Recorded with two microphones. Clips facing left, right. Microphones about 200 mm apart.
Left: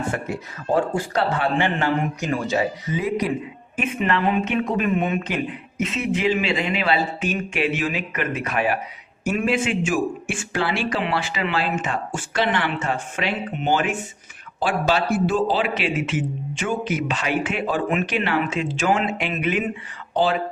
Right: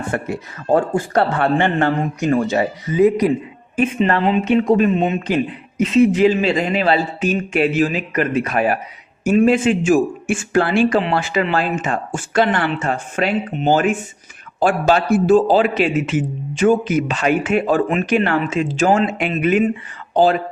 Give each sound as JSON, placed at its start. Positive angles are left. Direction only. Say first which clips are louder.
{"t": 0.1, "sound": "a man's voice", "louder": "right 4 dB", "side_deg": -60}
{"t": 5.8, "sound": "a man's voice", "louder": "right 10 dB", "side_deg": -35}